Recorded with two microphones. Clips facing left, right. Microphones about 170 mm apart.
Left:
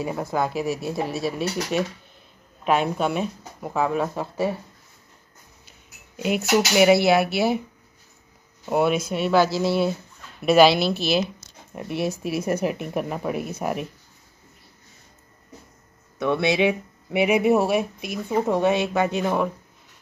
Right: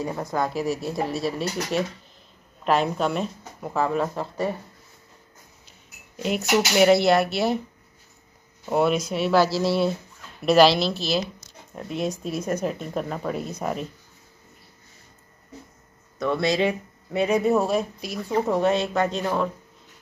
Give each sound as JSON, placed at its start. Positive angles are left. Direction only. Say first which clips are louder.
{"t": 0.0, "sound": "speech", "louder": "left 1 dB", "side_deg": 5}
{"t": 5.7, "sound": "speech", "louder": "even", "side_deg": 5}
{"t": 8.6, "sound": "speech", "louder": "even", "side_deg": 0}
{"t": 12.0, "sound": "speech", "louder": "left 2 dB", "side_deg": 10}
{"t": 16.4, "sound": "speech", "louder": "left 2 dB", "side_deg": 70}
{"t": 17.2, "sound": "speech", "louder": "left 2 dB", "side_deg": 10}